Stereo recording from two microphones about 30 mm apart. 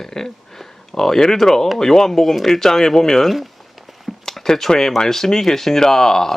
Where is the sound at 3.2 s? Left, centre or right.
Centre.